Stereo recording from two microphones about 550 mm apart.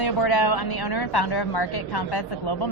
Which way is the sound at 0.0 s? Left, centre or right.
Left.